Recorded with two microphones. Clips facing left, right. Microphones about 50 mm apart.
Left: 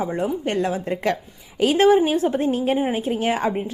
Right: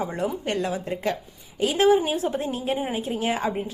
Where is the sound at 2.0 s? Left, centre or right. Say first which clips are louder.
Left 6 dB; left.